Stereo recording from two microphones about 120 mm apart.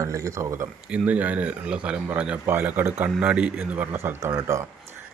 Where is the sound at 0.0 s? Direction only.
25° right (ahead or behind).